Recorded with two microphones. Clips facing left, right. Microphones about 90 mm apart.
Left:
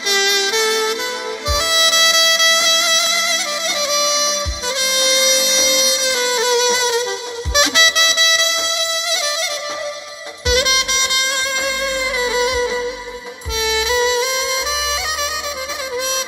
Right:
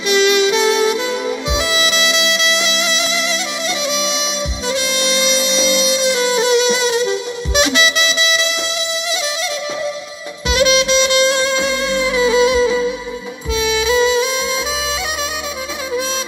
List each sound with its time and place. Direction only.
0.1 s saxophone: 75° left (ahead or behind)
1.5 s music: 85° left
10.5 s saxophone: 55° left (ahead or behind)
12.4 s music: 60° left (ahead or behind)
13.6 s music: 80° left